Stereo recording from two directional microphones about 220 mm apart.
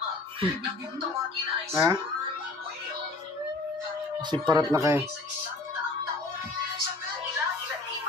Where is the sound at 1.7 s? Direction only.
10° right (ahead or behind).